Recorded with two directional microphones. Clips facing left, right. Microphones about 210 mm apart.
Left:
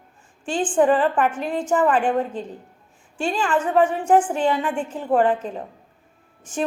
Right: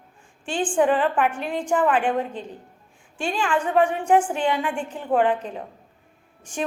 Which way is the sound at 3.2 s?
10° right (ahead or behind).